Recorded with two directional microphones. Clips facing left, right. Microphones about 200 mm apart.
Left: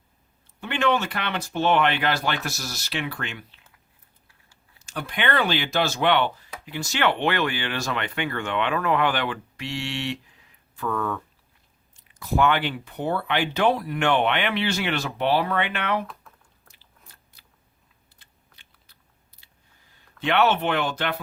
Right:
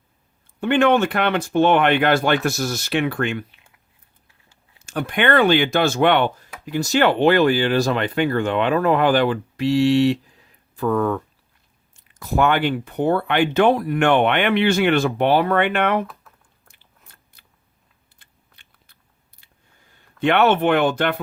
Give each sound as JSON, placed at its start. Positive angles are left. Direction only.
{"t": 0.6, "sound": "speech", "side_deg": -50}
{"t": 4.9, "sound": "speech", "side_deg": -55}
{"t": 12.2, "sound": "speech", "side_deg": -50}
{"t": 17.4, "sound": "scissors", "side_deg": -55}
{"t": 18.2, "sound": "shuffling cards", "side_deg": -55}
{"t": 20.2, "sound": "speech", "side_deg": -55}